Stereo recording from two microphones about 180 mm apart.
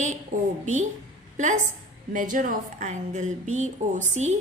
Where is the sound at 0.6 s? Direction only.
40° right (ahead or behind).